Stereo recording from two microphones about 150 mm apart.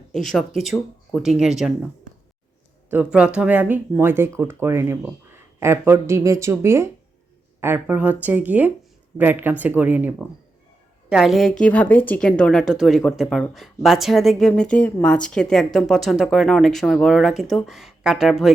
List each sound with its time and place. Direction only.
0.1 s speech: centre (ahead or behind)
2.9 s speech: 10° right (ahead or behind)